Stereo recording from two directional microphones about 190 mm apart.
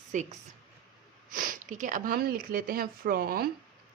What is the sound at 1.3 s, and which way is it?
Speech, 45° right (ahead or behind).